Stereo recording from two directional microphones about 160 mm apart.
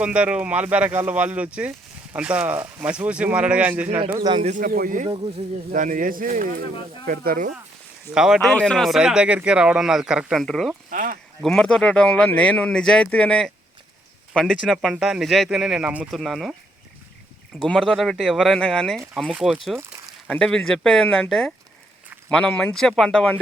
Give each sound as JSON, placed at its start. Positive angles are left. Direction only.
{"t": 0.0, "sound": "speech", "side_deg": -5}
{"t": 4.1, "sound": "speech", "side_deg": -25}
{"t": 4.4, "sound": "speech", "side_deg": -55}
{"t": 8.1, "sound": "speech", "side_deg": -5}
{"t": 10.8, "sound": "speech", "side_deg": -60}
{"t": 11.4, "sound": "speech", "side_deg": 5}
{"t": 14.6, "sound": "speech", "side_deg": 0}
{"t": 17.6, "sound": "speech", "side_deg": 5}